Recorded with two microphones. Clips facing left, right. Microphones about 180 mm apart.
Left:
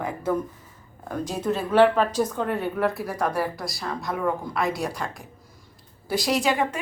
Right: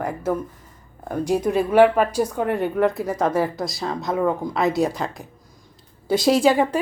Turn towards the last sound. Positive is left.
turn(degrees=-30)  # may be behind; listen again after turning